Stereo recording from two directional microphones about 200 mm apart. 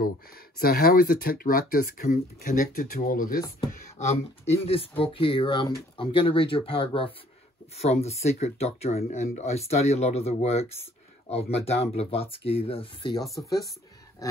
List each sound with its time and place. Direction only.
0.6 s speech: 50° left (ahead or behind)
4.0 s speech: 35° left (ahead or behind); by 13.6 s 15° left (ahead or behind)